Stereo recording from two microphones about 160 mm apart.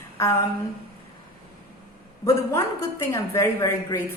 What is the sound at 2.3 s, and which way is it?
A woman's voice, 15° left (ahead or behind).